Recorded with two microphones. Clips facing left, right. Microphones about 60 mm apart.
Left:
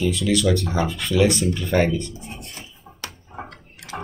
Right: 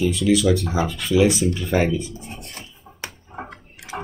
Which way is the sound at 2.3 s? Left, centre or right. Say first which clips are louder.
Even; right.